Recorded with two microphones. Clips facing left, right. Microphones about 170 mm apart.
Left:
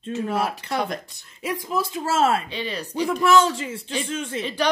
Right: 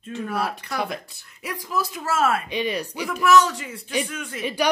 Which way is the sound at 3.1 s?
30° left (ahead or behind).